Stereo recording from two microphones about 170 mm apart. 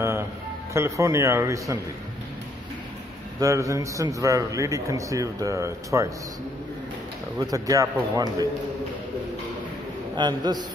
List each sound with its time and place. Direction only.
0.7 s a man's voice: 15° right (ahead or behind)
3.3 s a man's voice: 20° right (ahead or behind)
7.3 s a man's voice: 20° right (ahead or behind)
10.1 s a man's voice: 25° right (ahead or behind)